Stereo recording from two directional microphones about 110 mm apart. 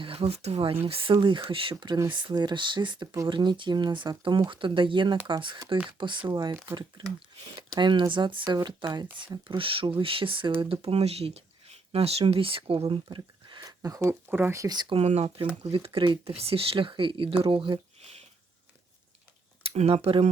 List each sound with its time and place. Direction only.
0.0 s speech: 60° right (ahead or behind)
7.4 s speech: 40° right (ahead or behind); by 13.0 s 55° right (ahead or behind)
13.1 s a sound: 45° right (ahead or behind)
13.7 s speech: 30° right (ahead or behind)
14.3 s speech: 15° right (ahead or behind)
14.5 s speech: 35° right (ahead or behind)
14.9 s speech: 70° right (ahead or behind)
15.6 s speech: 60° right (ahead or behind)
19.6 s speech: 65° right (ahead or behind)